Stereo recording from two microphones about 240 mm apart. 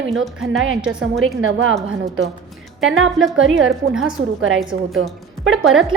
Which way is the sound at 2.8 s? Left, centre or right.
Right.